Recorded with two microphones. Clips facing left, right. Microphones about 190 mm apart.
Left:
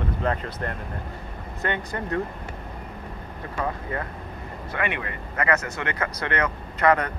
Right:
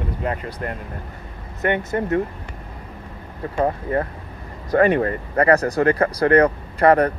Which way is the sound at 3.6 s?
35° right (ahead or behind).